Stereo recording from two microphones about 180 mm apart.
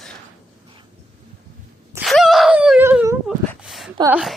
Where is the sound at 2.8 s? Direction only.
10° right (ahead or behind).